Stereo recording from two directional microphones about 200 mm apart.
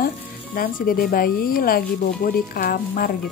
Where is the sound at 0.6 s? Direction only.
45° left (ahead or behind).